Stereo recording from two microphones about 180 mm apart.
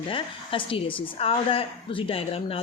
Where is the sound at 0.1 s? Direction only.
30° left (ahead or behind).